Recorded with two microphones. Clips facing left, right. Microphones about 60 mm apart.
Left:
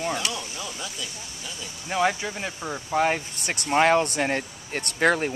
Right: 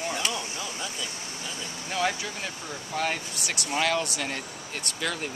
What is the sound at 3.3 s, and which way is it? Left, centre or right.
Speech, left.